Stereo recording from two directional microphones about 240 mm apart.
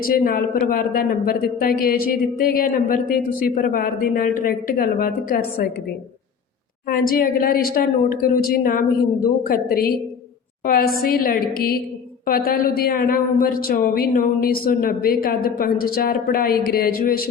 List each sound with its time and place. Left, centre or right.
0.0 s speech: left
6.8 s speech: left
11.0 s speech: left